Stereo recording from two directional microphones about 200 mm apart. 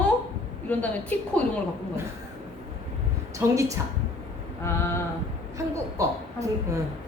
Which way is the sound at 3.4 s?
15° right (ahead or behind).